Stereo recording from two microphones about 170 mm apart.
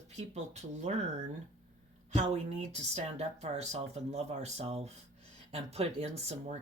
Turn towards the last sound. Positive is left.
turn(degrees=-40)  # may be behind; listen again after turning